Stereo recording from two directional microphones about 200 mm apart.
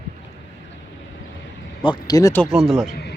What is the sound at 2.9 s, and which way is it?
Music, 55° left (ahead or behind).